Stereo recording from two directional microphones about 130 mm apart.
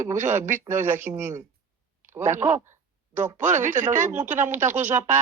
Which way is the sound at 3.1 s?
70° right (ahead or behind).